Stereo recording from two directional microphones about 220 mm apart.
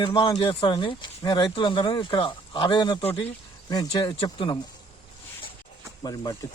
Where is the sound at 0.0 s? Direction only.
20° left (ahead or behind).